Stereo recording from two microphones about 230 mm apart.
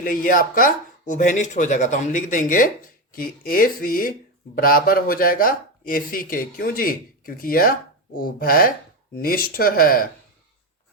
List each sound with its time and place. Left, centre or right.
0.0 s speech: left